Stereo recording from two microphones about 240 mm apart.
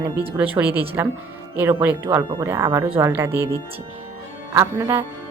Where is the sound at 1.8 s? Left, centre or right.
Centre.